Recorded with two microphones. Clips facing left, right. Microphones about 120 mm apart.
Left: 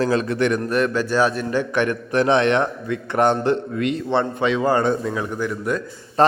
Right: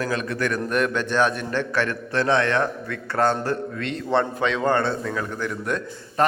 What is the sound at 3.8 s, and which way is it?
A man's voice, 5° left (ahead or behind).